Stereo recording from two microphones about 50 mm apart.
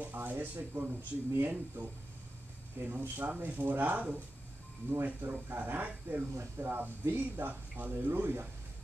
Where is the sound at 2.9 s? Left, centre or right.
Right.